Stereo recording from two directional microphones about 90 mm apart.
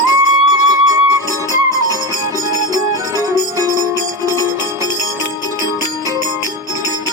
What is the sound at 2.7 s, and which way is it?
Music, 40° right (ahead or behind).